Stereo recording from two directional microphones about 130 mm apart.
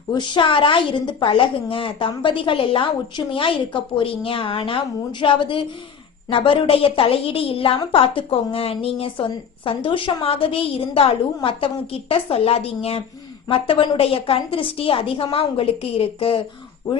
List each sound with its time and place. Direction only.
0.1 s a woman's voice: 35° left (ahead or behind)